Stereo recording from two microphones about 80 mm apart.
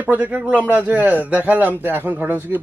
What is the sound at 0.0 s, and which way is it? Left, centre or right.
A man's voice, right.